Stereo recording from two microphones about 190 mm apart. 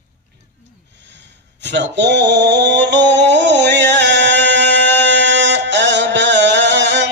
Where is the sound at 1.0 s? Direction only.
65° right (ahead or behind).